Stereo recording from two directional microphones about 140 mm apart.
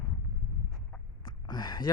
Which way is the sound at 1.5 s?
30° left (ahead or behind).